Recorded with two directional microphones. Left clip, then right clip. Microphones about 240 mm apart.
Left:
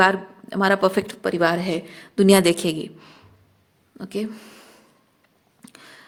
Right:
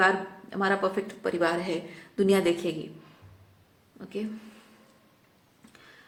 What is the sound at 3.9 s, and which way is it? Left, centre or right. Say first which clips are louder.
Speech: left 7 dB; left.